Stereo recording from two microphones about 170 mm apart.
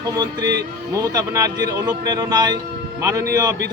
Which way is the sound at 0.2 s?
25° right (ahead or behind).